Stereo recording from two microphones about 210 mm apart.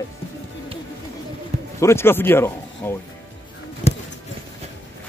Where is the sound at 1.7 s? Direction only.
10° left (ahead or behind).